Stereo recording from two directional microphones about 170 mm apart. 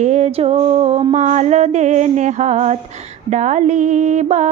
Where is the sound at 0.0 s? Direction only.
40° right (ahead or behind).